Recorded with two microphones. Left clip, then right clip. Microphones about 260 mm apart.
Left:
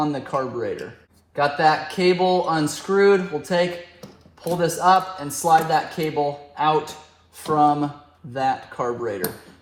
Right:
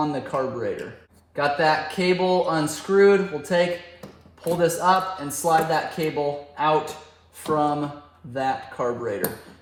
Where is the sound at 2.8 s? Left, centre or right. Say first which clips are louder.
Even; centre.